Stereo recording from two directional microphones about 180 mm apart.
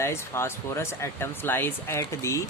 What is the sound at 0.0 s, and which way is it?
Speech, 15° left (ahead or behind).